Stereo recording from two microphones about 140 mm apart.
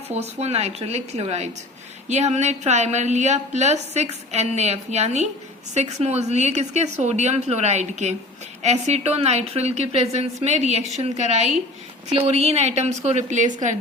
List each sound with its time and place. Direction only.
0.1 s a woman's voice: 50° right (ahead or behind)